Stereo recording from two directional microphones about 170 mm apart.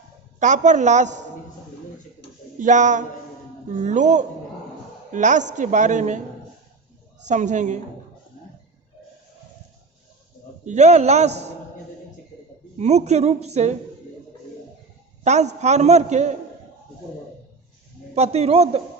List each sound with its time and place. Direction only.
0.3 s a woman's voice: 45° right (ahead or behind)
2.6 s a woman's voice: 45° right (ahead or behind)
7.3 s a woman's voice: 45° right (ahead or behind)
10.7 s a woman's voice: 40° right (ahead or behind)
12.8 s a woman's voice: 40° right (ahead or behind)
15.2 s a woman's voice: 40° right (ahead or behind)
18.1 s a woman's voice: 40° right (ahead or behind)